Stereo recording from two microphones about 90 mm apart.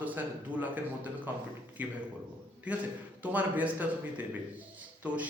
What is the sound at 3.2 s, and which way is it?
A man's voice, 15° right (ahead or behind).